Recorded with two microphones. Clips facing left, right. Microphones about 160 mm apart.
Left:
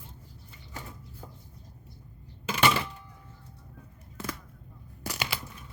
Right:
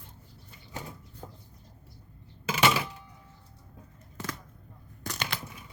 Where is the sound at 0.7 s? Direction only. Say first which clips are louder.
Right 3 dB; 20° right (ahead or behind).